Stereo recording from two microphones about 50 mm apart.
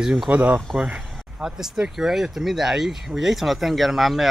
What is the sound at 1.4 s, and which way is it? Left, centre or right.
Speech, centre.